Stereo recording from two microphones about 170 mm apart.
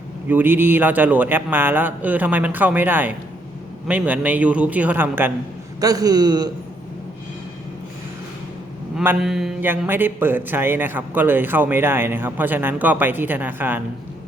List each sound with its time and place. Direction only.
0.3 s a man's voice: 10° right (ahead or behind)
9.0 s a man's voice: centre (ahead or behind)